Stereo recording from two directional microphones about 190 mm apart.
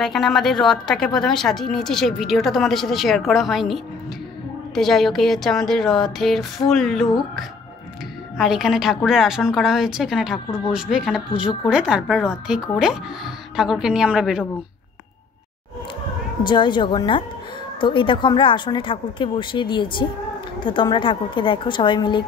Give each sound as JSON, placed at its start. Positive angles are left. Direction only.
{"t": 0.0, "sound": "a woman's voice", "side_deg": 0}
{"t": 8.4, "sound": "a woman's voice", "side_deg": 0}
{"t": 16.4, "sound": "a woman's voice", "side_deg": 25}